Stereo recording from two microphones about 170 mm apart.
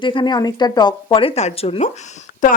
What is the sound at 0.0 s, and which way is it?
Speech, 30° left (ahead or behind).